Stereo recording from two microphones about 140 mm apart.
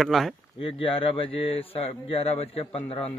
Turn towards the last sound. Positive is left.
turn(degrees=45)  # may be behind; listen again after turning